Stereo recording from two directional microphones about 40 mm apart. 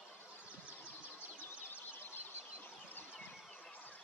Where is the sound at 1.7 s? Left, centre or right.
Left.